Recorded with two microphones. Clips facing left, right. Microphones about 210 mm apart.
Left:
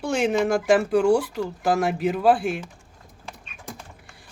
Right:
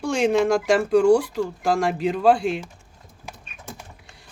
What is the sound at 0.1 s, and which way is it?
Speech, 5° left (ahead or behind).